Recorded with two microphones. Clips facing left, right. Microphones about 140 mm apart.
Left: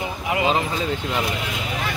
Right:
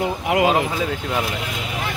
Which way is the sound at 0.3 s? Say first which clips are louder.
Right 3 dB; 65° right (ahead or behind).